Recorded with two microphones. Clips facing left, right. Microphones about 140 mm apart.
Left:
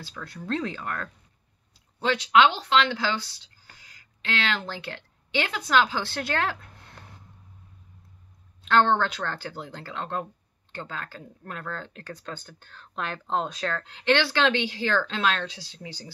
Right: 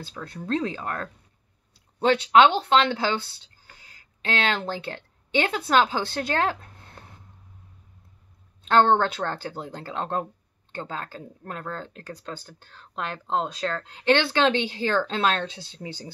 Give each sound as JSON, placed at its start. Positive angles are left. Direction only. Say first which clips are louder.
{"t": 0.1, "sound": "speech", "louder": "right 3 dB", "side_deg": -30}
{"t": 4.2, "sound": "speech", "louder": "right 3 dB", "side_deg": -40}
{"t": 5.5, "sound": "a woman's voice", "louder": "right 1 dB", "side_deg": -30}
{"t": 8.6, "sound": "speech", "louder": "right 2 dB", "side_deg": -40}
{"t": 9.3, "sound": "speech", "louder": "right 3 dB", "side_deg": -25}
{"t": 9.9, "sound": "speech", "louder": "right 3 dB", "side_deg": -35}